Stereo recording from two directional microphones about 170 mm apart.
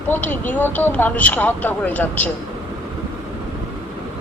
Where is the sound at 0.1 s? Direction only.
10° left (ahead or behind).